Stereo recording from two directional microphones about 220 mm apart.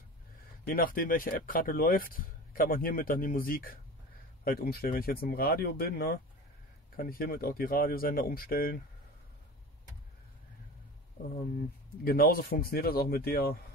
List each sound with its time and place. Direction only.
0.7 s speech: 40° left (ahead or behind)
12.0 s speech: 45° left (ahead or behind)